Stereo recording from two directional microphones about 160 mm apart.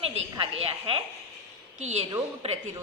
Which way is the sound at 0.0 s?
35° right (ahead or behind).